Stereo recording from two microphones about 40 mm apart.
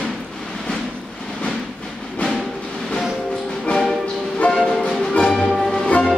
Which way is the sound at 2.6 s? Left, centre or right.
Centre.